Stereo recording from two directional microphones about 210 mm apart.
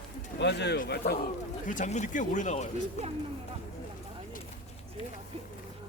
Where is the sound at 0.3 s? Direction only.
55° left (ahead or behind).